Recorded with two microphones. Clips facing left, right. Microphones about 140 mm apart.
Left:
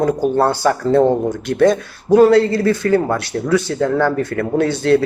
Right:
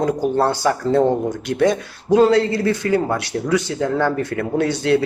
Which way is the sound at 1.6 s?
20° right (ahead or behind).